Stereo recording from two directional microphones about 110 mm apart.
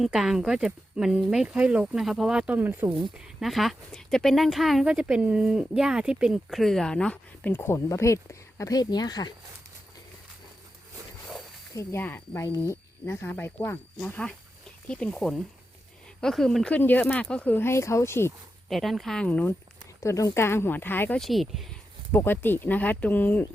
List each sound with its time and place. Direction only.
0.0 s speech: 5° right (ahead or behind)
3.4 s speech: centre (ahead or behind); by 9.3 s 40° left (ahead or behind)
11.7 s speech: 30° left (ahead or behind)
14.0 s speech: 10° left (ahead or behind)
16.7 s speech: 15° left (ahead or behind)
18.7 s speech: centre (ahead or behind)
20.0 s speech: 30° left (ahead or behind)
21.2 s speech: centre (ahead or behind)
22.1 s speech: 20° left (ahead or behind)